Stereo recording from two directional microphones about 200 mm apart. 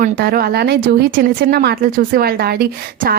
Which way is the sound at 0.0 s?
50° right (ahead or behind).